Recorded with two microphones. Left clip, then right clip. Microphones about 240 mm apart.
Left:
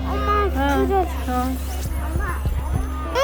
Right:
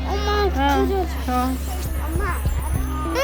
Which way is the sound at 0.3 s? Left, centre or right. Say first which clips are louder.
Left 1 dB; centre.